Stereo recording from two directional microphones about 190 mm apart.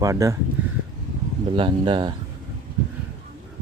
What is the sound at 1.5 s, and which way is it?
Speech, 25° right (ahead or behind).